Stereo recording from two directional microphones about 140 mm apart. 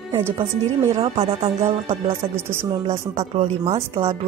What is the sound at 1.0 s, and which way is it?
Music, 45° right (ahead or behind).